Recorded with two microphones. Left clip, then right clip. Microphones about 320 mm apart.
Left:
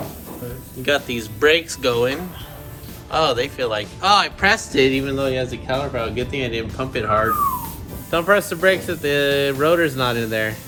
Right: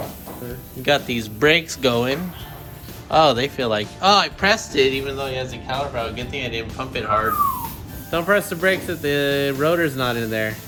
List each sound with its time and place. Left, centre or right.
0.9 s speech: centre
8.1 s speech: centre